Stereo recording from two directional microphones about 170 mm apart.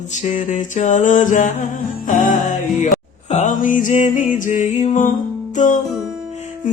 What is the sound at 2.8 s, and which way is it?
Speech, 45° left (ahead or behind).